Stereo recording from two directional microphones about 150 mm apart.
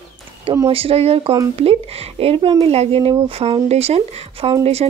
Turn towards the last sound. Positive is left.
turn(degrees=-45)  # may be behind; listen again after turning